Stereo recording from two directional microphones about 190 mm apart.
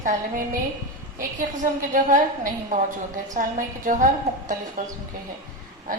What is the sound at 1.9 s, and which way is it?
Speech, 45° right (ahead or behind).